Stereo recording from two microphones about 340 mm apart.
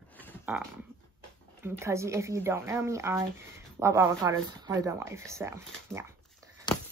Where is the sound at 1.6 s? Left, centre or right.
Centre.